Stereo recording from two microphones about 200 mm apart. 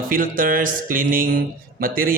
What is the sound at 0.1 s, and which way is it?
Speech, 45° right (ahead or behind).